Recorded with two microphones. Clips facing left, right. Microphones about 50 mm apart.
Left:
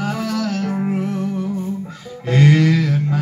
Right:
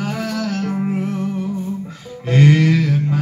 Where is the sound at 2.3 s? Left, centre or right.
Centre.